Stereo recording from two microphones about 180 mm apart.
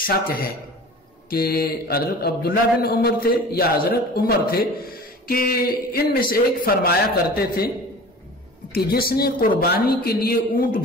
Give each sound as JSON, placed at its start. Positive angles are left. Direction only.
{"t": 0.0, "sound": "a man's voice", "side_deg": 55}
{"t": 8.7, "sound": "a man's voice", "side_deg": 55}